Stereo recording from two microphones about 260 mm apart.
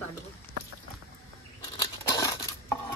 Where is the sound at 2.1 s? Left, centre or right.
Centre.